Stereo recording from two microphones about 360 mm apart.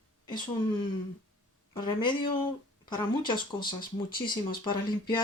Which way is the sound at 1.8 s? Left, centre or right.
Centre.